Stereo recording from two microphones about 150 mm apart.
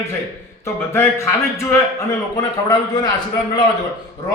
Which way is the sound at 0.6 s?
20° left (ahead or behind).